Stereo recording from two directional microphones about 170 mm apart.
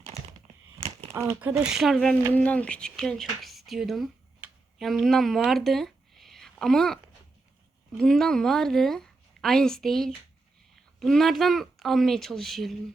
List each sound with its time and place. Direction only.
0.0 s crumpling: 40° right (ahead or behind)
1.1 s a woman's voice: 15° right (ahead or behind); by 12.7 s centre (ahead or behind)